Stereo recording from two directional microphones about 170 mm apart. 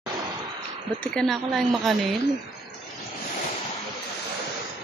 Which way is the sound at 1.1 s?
Centre (ahead or behind).